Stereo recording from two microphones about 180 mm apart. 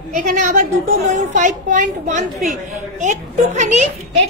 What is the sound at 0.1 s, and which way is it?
A woman's voice, 50° right (ahead or behind).